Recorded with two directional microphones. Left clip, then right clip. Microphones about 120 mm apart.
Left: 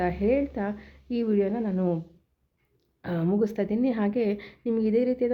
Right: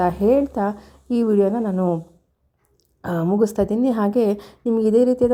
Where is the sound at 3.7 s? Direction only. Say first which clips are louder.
Right 7 dB; 40° right (ahead or behind).